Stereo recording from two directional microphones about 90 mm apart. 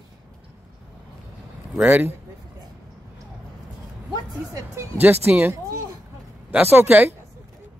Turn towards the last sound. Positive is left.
turn(degrees=-20)  # may be behind; listen again after turning